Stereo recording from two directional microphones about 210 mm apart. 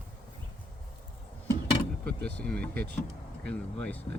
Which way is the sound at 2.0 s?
5° left (ahead or behind).